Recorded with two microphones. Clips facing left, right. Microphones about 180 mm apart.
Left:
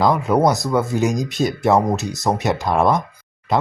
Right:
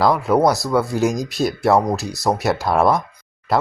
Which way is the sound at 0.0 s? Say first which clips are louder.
Even; centre (ahead or behind).